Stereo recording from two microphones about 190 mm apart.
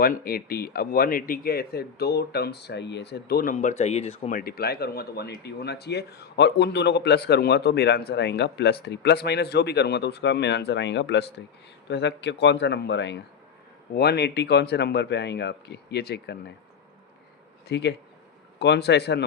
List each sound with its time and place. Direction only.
0.0 s speech: 50° left (ahead or behind); by 4.3 s 30° left (ahead or behind)
4.3 s speech: 50° left (ahead or behind)
17.7 s speech: 65° left (ahead or behind)